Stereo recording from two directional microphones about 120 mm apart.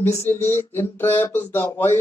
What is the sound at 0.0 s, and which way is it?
Speech, 20° left (ahead or behind).